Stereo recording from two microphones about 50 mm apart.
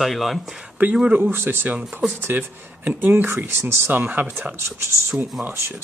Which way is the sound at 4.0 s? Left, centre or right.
Right.